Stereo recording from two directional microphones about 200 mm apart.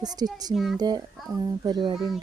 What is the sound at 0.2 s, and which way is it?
Speech, 20° right (ahead or behind).